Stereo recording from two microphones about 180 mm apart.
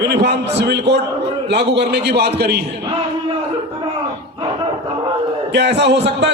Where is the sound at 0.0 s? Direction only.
70° right (ahead or behind).